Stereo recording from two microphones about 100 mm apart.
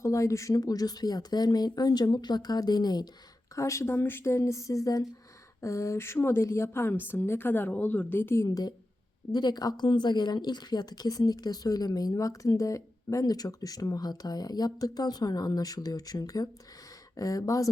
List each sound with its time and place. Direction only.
0.0 s speech: 30° left (ahead or behind)
3.5 s a woman's voice: 30° left (ahead or behind)
8.4 s a woman's voice: 40° left (ahead or behind)